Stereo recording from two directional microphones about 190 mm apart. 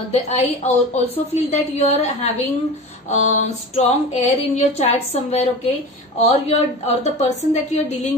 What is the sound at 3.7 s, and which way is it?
A woman's voice, 35° left (ahead or behind).